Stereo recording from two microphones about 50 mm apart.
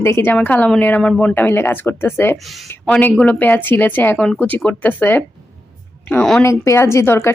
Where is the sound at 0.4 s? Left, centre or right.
Left.